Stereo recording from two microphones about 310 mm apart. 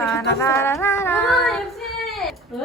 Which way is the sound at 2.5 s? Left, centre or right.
Centre.